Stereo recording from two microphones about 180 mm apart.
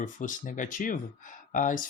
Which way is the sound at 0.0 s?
45° left (ahead or behind).